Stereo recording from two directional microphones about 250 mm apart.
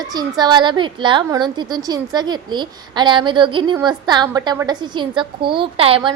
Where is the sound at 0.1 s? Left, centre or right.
Centre.